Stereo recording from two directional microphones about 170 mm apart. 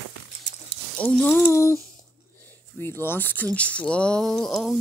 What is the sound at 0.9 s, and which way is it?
Speech, 10° left (ahead or behind).